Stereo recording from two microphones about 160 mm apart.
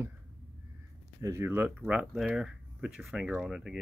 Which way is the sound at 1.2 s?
15° right (ahead or behind).